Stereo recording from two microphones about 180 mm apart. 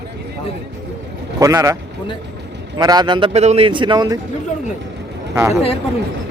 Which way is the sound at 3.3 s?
35° right (ahead or behind).